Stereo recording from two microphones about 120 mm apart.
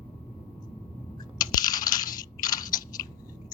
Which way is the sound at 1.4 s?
35° left (ahead or behind).